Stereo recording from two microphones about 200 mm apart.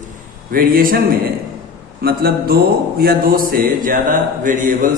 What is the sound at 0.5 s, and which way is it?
Speech, 45° right (ahead or behind).